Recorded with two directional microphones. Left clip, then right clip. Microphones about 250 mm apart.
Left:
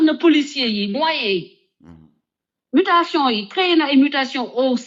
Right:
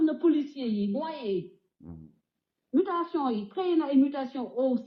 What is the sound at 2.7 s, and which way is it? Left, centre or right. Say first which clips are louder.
Speech: left 12 dB; left.